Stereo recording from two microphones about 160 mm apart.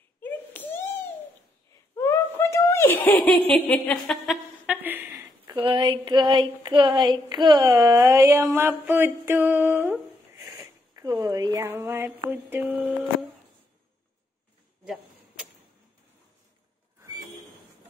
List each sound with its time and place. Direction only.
0.2 s a sound: 10° left (ahead or behind)
2.0 s snicker: 15° left (ahead or behind); by 4.7 s centre (ahead or behind)
4.8 s speech: 15° right (ahead or behind)